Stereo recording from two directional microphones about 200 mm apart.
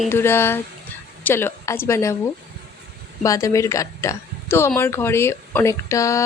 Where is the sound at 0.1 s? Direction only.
10° left (ahead or behind).